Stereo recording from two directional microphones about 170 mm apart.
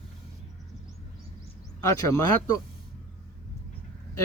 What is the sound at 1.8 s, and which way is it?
Speech, 20° left (ahead or behind).